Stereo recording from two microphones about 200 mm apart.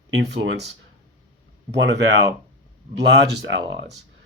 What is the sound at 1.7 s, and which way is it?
Speech, 60° right (ahead or behind).